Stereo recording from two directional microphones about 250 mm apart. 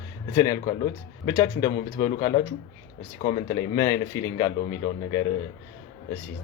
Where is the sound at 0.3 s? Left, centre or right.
Centre.